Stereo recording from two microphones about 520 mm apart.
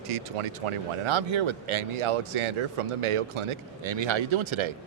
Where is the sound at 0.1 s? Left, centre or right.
Right.